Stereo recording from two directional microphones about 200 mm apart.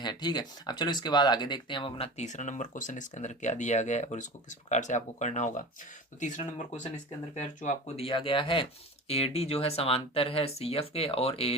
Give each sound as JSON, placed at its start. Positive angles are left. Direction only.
{"t": 0.0, "sound": "speech", "side_deg": 20}